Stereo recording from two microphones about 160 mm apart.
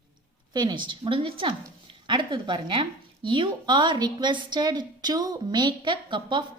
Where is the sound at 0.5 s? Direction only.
25° right (ahead or behind).